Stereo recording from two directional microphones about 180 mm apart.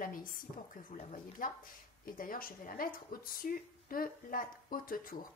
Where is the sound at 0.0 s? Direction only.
50° left (ahead or behind).